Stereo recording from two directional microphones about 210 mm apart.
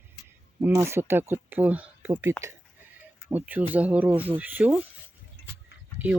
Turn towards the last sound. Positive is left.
turn(degrees=-10)  # may be behind; listen again after turning